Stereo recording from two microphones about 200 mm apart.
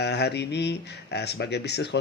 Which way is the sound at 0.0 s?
55° left (ahead or behind).